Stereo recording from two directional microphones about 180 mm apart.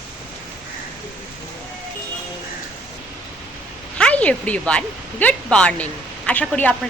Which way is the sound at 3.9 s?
5° left (ahead or behind).